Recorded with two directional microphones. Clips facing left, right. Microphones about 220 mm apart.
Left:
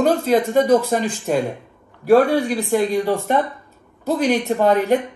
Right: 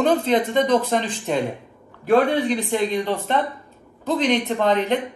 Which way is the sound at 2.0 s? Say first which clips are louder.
Left 3 dB; 10° left (ahead or behind).